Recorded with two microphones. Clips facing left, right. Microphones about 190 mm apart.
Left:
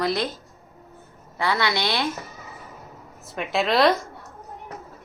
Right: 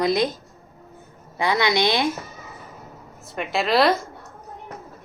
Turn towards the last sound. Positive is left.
turn(degrees=0)  # may be behind; listen again after turning